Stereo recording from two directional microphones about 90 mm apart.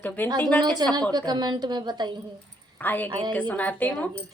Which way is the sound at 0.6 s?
50° right (ahead or behind).